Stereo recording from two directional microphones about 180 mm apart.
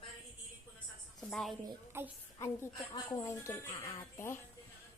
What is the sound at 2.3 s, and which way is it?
A woman's voice, 20° left (ahead or behind).